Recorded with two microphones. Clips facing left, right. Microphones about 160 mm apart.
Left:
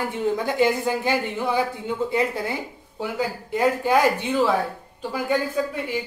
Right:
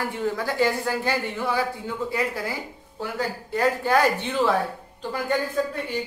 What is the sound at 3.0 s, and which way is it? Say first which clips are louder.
Speech: left 2 dB; 15° left (ahead or behind).